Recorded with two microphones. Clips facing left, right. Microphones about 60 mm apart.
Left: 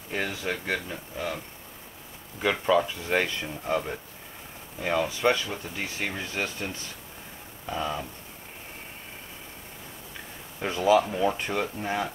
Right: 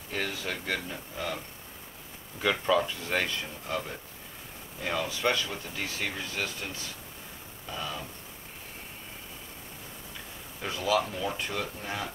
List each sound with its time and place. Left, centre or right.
0.1 s speech: centre
2.4 s speech: centre
7.7 s speech: left
10.6 s speech: left